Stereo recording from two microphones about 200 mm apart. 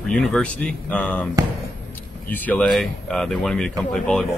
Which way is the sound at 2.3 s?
10° left (ahead or behind).